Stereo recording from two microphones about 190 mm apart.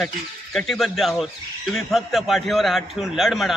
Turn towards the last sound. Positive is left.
turn(degrees=0)  # may be behind; listen again after turning